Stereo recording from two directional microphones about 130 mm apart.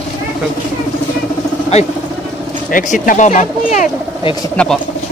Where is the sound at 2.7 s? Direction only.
90° left; by 3.9 s 65° left (ahead or behind).